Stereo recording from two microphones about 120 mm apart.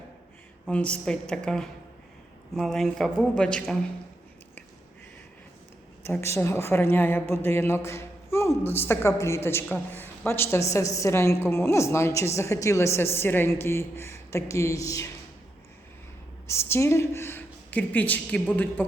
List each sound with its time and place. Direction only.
0.7 s a woman's voice: 10° left (ahead or behind)
6.1 s a woman's voice: 25° left (ahead or behind)
16.5 s a woman's voice: 20° left (ahead or behind)